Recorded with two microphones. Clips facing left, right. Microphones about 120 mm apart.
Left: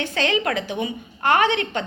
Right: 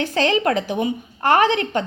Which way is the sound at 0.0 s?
40° right (ahead or behind).